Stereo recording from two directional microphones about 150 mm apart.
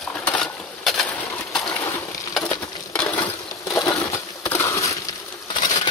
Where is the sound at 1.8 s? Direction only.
20° left (ahead or behind).